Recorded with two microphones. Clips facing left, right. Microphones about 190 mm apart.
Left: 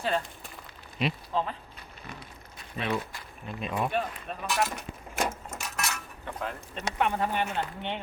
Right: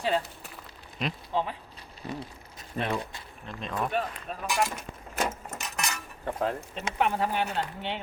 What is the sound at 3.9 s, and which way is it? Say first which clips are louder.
Speech: even; centre (ahead or behind).